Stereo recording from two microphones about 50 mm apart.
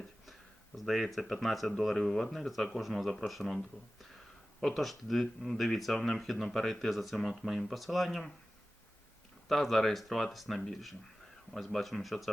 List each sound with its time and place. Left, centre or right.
0.8 s speech: centre
9.5 s speech: centre